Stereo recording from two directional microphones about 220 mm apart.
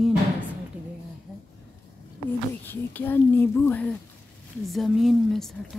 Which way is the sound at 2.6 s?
10° left (ahead or behind).